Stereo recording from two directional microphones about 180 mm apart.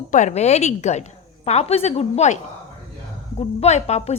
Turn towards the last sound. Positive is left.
turn(degrees=40)  # may be behind; listen again after turning